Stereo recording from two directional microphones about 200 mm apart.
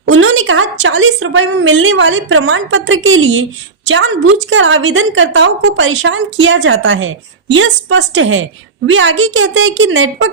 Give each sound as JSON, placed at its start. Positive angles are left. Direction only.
{"t": 0.0, "sound": "a woman's voice", "side_deg": -85}
{"t": 3.9, "sound": "a woman's voice", "side_deg": -75}
{"t": 8.9, "sound": "a woman's voice", "side_deg": -85}